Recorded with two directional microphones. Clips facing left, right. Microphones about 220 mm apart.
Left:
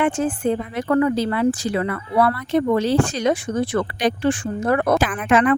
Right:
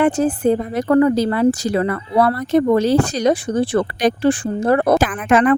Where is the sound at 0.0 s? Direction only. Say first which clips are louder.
Right 4 dB; 40° right (ahead or behind).